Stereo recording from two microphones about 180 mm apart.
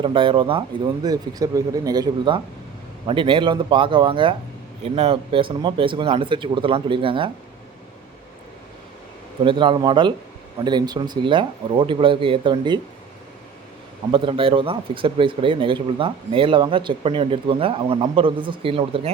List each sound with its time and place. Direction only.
0.0 s speech: 30° right (ahead or behind)
9.4 s speech: 30° right (ahead or behind)
14.1 s speech: 30° right (ahead or behind)